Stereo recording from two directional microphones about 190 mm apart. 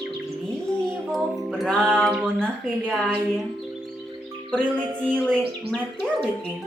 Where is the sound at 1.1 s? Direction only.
Centre (ahead or behind).